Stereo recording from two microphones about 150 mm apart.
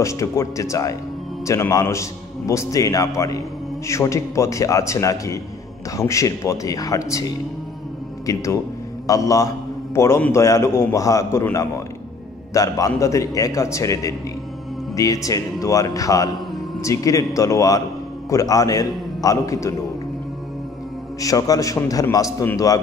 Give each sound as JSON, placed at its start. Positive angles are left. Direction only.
{"t": 0.0, "sound": "a man's voice", "side_deg": 20}
{"t": 21.2, "sound": "a man's voice", "side_deg": 25}